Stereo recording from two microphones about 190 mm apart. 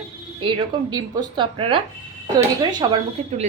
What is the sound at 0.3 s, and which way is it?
A woman's voice, 25° right (ahead or behind).